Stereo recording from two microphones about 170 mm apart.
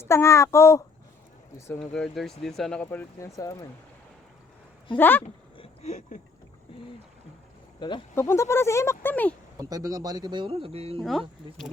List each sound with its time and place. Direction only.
0.0 s speech: 15° left (ahead or behind)
1.8 s speech: 5° left (ahead or behind); by 3.7 s 20° left (ahead or behind)
4.9 s speech: 10° left (ahead or behind)
5.5 s a sound: 40° left (ahead or behind)
7.8 s speech: 30° left (ahead or behind)
8.1 s speech: 15° left (ahead or behind)
9.6 s speech: 20° right (ahead or behind); by 11.0 s 35° right (ahead or behind)
11.0 s speech: centre (ahead or behind)